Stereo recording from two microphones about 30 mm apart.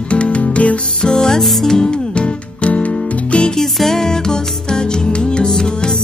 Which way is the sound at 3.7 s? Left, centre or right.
Centre.